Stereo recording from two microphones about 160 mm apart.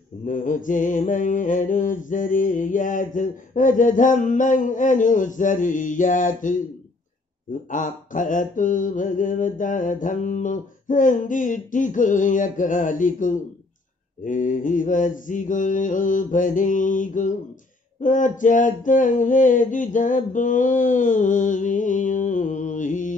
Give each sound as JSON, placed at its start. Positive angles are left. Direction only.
{"t": 0.2, "sound": "mantra", "side_deg": 55}
{"t": 7.7, "sound": "mantra", "side_deg": 55}